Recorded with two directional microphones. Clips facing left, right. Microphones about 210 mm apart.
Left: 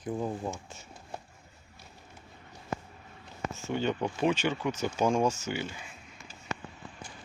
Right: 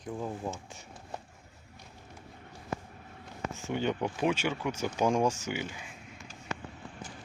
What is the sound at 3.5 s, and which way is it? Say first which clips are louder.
Speech: left 1 dB; 15° right (ahead or behind).